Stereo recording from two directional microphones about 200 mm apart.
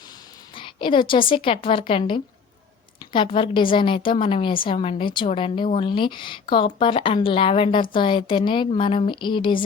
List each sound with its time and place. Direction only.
0.5 s a woman's voice: 25° left (ahead or behind)